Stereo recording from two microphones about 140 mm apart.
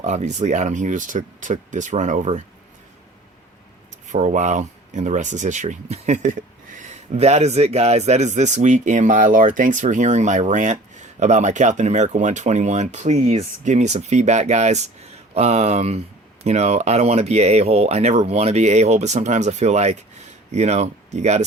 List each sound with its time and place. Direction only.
0.0 s speech: 60° right (ahead or behind)
4.1 s speech: 60° right (ahead or behind)